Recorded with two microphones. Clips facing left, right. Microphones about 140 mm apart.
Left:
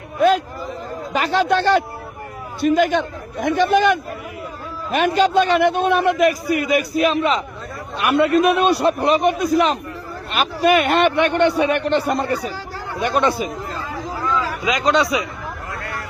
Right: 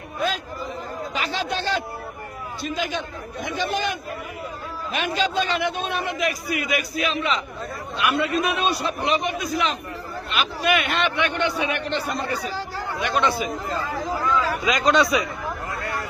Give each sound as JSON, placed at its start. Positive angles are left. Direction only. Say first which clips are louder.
{"t": 0.2, "sound": "a man's voice", "louder": "left 10 dB", "side_deg": 55}
{"t": 4.9, "sound": "a man's voice", "louder": "left 8 dB", "side_deg": 50}
{"t": 14.8, "sound": "speech", "louder": "left 1 dB", "side_deg": 20}